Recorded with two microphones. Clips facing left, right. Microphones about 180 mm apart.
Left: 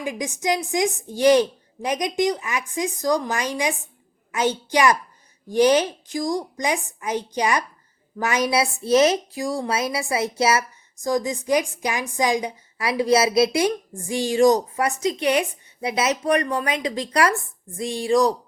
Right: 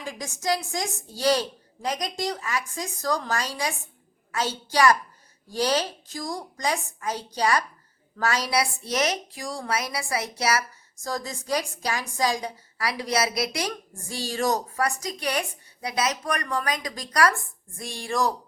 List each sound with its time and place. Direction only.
0.0 s a woman's voice: 15° left (ahead or behind)